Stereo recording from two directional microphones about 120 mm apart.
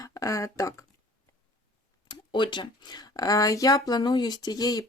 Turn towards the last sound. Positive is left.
turn(degrees=35)  # may be behind; listen again after turning